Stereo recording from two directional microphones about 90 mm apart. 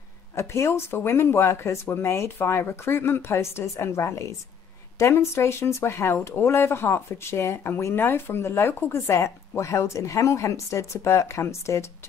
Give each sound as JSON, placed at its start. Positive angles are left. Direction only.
{"t": 0.4, "sound": "speech", "side_deg": 30}